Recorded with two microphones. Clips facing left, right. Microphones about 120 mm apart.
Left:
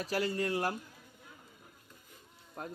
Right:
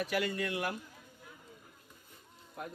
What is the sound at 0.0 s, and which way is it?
Speech, 35° left (ahead or behind).